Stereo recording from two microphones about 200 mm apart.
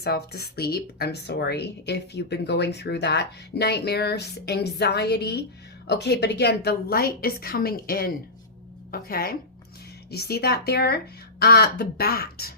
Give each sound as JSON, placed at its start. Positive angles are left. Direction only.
{"t": 0.0, "sound": "speech", "side_deg": 50}